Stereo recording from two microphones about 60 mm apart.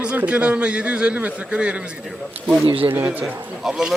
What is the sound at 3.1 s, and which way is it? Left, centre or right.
Speech, right.